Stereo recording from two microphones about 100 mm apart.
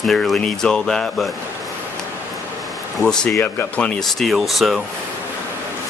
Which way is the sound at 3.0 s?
10° left (ahead or behind).